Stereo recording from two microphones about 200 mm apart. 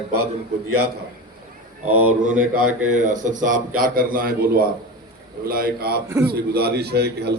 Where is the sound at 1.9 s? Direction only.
90° right.